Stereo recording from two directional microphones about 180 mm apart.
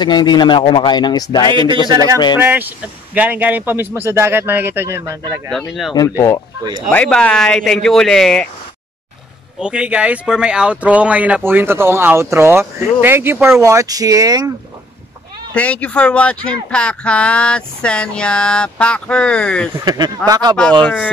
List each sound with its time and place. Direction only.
0.0 s speech: 25° left (ahead or behind)
1.5 s speech: 25° right (ahead or behind)
2.3 s speech: 10° right (ahead or behind)
5.5 s speech: centre (ahead or behind)
5.9 s speech: 20° left (ahead or behind)
6.9 s speech: 5° left (ahead or behind)
9.6 s speech: 5° right (ahead or behind); by 14.5 s 20° right (ahead or behind)
15.5 s speech: 5° left (ahead or behind)
19.8 s speech: 20° right (ahead or behind)
20.8 s speech: 10° left (ahead or behind)